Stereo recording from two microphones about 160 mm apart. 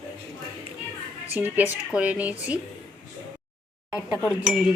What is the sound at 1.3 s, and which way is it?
A woman's voice, 10° right (ahead or behind).